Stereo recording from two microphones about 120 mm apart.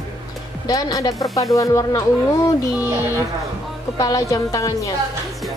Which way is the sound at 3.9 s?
30° left (ahead or behind).